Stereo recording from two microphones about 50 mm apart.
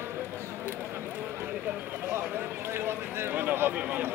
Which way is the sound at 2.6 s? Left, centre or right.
Right.